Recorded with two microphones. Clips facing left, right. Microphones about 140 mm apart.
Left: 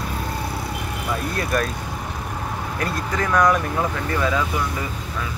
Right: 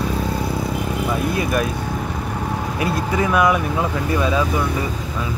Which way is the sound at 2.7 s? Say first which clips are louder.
Right 4 dB; 10° right (ahead or behind).